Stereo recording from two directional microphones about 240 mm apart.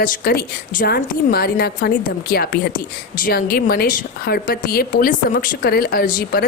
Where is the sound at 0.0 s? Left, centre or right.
Left.